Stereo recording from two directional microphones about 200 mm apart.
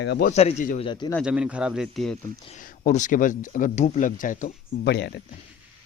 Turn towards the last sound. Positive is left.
turn(degrees=55)  # may be behind; listen again after turning